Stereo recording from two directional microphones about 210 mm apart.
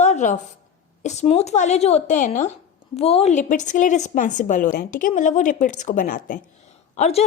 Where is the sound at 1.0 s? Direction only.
30° left (ahead or behind).